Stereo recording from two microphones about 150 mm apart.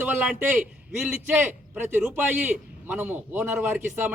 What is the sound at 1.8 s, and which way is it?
Speech, 15° right (ahead or behind).